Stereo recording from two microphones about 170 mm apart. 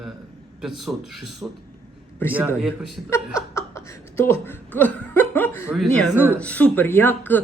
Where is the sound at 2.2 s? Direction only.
10° left (ahead or behind).